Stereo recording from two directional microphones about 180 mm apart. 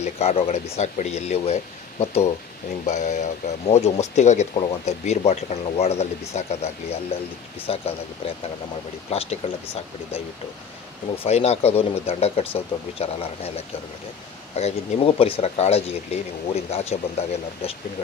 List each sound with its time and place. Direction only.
0.0 s speech: 35° left (ahead or behind)
9.1 s speech: 35° left (ahead or behind)
11.2 s speech: 35° left (ahead or behind)
14.5 s speech: 35° left (ahead or behind)